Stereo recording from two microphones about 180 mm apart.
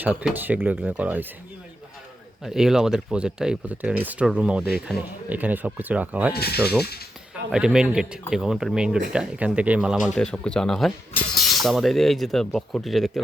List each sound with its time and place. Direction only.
0.0 s speech: 10° right (ahead or behind)
2.4 s speech: centre (ahead or behind)
6.3 s speech: 60° left (ahead or behind)
7.5 s speech: 5° right (ahead or behind)